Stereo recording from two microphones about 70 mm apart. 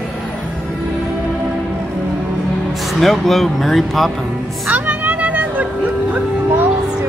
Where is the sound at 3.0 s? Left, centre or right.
Centre.